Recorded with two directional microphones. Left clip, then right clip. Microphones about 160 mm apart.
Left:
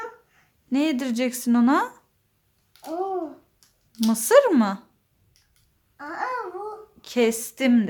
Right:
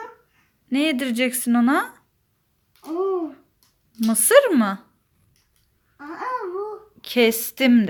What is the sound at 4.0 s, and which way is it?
Speech, centre (ahead or behind).